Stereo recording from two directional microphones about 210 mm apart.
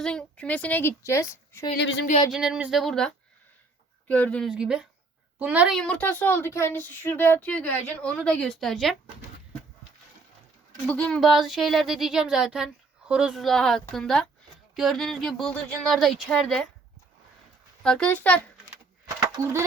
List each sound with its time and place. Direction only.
0.0 s a woman's voice: 5° left (ahead or behind)
1.7 s speech: 55° left (ahead or behind)
2.3 s speech: 5° right (ahead or behind)
4.1 s a woman's voice: 5° left (ahead or behind)
10.8 s speech: 5° left (ahead or behind)
17.8 s speech: 5° left (ahead or behind)
19.4 s speech: 15° right (ahead or behind)